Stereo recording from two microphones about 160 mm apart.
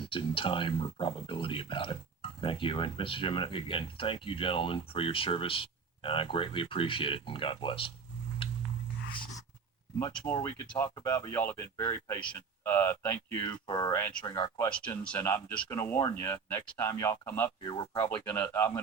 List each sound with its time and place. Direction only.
0.0 s speech: 35° left (ahead or behind)
10.1 s speech: 5° left (ahead or behind)
13.7 s speech: 25° left (ahead or behind)
14.6 s speech: 10° left (ahead or behind)